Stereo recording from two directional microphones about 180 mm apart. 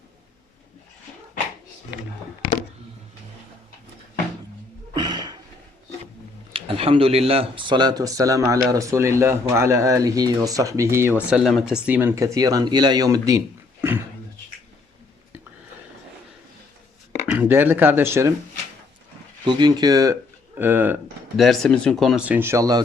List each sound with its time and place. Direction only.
4.9 s a sound: 25° right (ahead or behind)
6.5 s speech: 30° right (ahead or behind)
17.2 s speech: 10° right (ahead or behind)
19.5 s speech: 25° right (ahead or behind)
21.3 s speech: centre (ahead or behind); by 22.8 s 20° right (ahead or behind)